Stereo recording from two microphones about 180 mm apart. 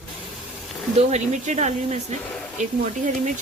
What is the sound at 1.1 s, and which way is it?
Speech, 40° right (ahead or behind).